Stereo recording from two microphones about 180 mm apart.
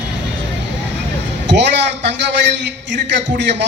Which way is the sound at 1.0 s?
75° right (ahead or behind).